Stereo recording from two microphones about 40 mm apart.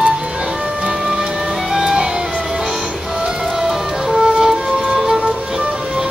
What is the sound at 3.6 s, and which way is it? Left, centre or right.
Music, centre.